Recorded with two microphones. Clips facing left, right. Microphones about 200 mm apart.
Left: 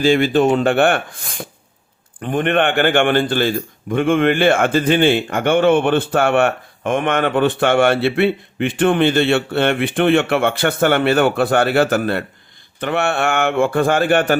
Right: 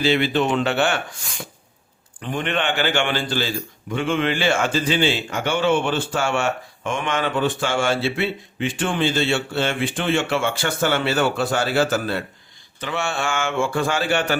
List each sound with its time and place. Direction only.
0.0 s a man's voice: 45° left (ahead or behind)